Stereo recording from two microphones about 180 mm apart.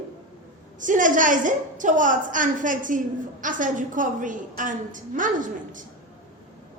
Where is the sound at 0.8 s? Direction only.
45° right (ahead or behind).